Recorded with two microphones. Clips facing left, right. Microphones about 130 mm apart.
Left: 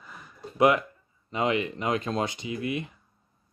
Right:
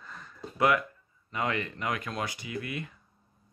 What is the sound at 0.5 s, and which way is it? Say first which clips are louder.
Speech: left 4 dB; 20° left (ahead or behind).